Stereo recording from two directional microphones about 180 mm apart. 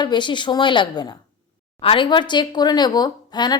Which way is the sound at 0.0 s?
25° left (ahead or behind).